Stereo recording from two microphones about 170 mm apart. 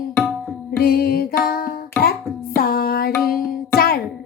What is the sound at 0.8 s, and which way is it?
Music, 60° left (ahead or behind).